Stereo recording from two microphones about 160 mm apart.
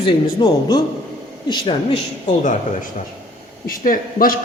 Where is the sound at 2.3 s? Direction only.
50° left (ahead or behind).